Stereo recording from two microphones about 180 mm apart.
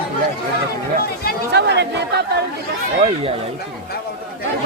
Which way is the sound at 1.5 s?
70° right (ahead or behind).